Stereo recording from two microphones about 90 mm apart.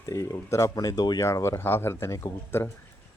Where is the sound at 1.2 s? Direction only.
35° left (ahead or behind).